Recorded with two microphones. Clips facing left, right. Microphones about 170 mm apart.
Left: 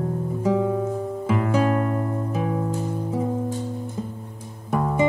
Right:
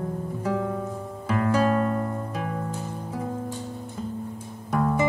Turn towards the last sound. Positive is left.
turn(degrees=10)  # may be behind; listen again after turning